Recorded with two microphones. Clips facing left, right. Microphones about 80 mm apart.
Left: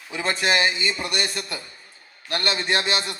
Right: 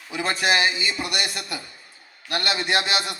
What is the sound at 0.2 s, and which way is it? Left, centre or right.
A man's voice, left.